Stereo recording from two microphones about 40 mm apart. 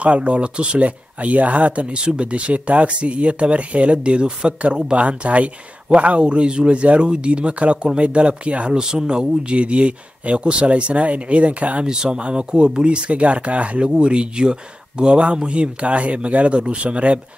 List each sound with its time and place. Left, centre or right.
0.0 s speech: right
11.8 s speech: centre